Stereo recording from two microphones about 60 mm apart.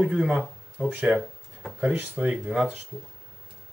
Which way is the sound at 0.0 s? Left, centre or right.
Centre.